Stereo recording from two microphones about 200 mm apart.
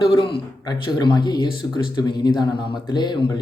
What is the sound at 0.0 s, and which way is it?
Speech, 25° left (ahead or behind).